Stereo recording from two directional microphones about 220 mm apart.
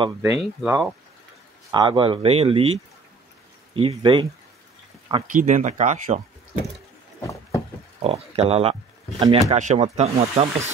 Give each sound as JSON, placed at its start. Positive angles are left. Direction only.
{"t": 0.0, "sound": "speech", "side_deg": -10}
{"t": 3.7, "sound": "speech", "side_deg": -25}
{"t": 5.2, "sound": "speech", "side_deg": -35}
{"t": 7.2, "sound": "a sound", "side_deg": 15}
{"t": 8.0, "sound": "speech", "side_deg": -25}